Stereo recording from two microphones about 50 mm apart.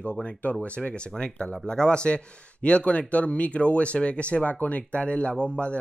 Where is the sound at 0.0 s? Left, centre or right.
Left.